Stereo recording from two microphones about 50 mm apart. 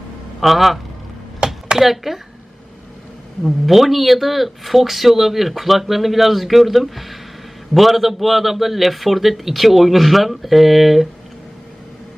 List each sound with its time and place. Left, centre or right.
0.3 s speech: centre
1.4 s a sound: centre
1.8 s speech: centre
3.4 s speech: centre